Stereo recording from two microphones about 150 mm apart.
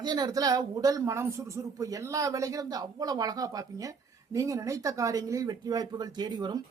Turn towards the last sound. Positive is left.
turn(degrees=-30)  # may be behind; listen again after turning